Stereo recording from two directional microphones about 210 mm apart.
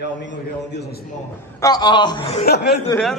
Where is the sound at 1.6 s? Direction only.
20° left (ahead or behind).